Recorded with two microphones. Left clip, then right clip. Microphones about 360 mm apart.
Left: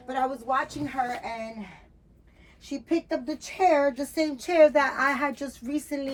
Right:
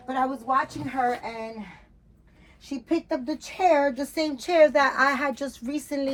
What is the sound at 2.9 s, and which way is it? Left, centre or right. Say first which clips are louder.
A woman's voice: right 1 dB; right.